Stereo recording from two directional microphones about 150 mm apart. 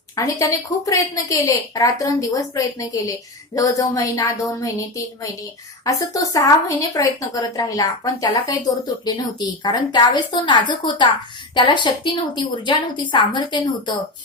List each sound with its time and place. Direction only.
0.2 s a woman's voice: 20° left (ahead or behind)